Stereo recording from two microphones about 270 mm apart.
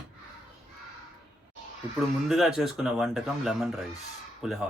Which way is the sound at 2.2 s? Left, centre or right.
Centre.